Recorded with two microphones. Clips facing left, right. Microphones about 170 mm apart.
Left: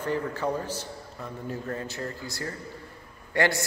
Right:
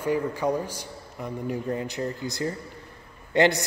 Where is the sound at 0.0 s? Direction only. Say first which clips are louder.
Right 3 dB; 10° right (ahead or behind).